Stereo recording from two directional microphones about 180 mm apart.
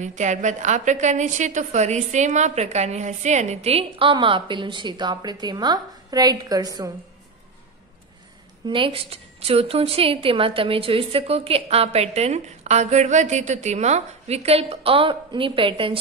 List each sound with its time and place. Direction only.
0.0 s a woman's voice: 40° right (ahead or behind); by 6.9 s 20° right (ahead or behind)
8.6 s a woman's voice: 30° right (ahead or behind)